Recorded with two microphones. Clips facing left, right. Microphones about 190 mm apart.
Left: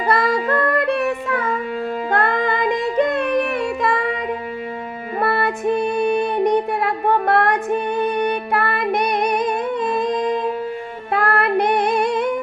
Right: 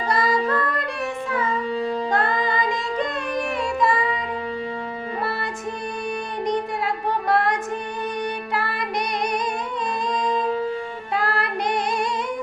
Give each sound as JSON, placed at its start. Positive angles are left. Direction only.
{"t": 0.1, "sound": "music", "side_deg": 60}
{"t": 5.2, "sound": "music", "side_deg": 60}